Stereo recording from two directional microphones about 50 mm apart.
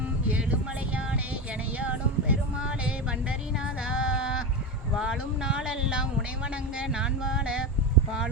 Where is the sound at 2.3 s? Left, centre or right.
Right.